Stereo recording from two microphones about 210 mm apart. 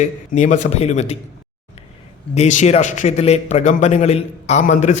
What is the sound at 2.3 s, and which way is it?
A man's voice, 35° left (ahead or behind).